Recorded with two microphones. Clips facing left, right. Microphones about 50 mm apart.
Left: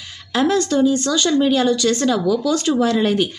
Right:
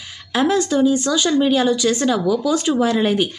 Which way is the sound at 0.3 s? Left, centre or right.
Centre.